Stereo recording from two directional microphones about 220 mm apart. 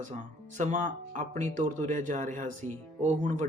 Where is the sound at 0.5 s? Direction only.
35° right (ahead or behind).